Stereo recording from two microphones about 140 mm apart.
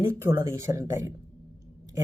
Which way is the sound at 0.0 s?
20° right (ahead or behind).